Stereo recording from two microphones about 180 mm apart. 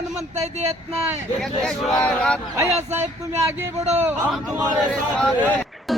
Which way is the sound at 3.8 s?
35° right (ahead or behind).